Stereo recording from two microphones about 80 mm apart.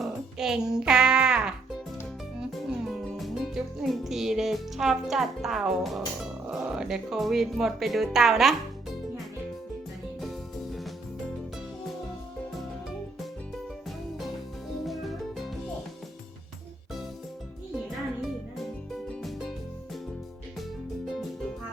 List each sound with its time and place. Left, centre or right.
0.0 s music: centre
3.2 s speech: centre
14.8 s music: centre
17.7 s music: centre